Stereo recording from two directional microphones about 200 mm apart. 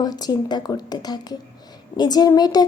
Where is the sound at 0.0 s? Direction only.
20° left (ahead or behind).